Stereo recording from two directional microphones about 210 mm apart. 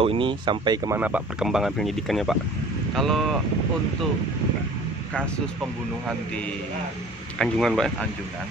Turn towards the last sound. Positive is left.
turn(degrees=0)  # may be behind; listen again after turning